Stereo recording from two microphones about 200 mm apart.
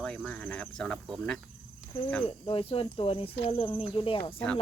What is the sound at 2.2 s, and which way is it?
Speech, 25° left (ahead or behind).